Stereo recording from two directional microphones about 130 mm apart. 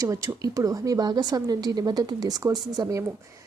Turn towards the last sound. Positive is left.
turn(degrees=-30)  # may be behind; listen again after turning